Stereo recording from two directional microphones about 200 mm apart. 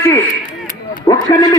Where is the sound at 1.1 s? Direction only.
15° left (ahead or behind).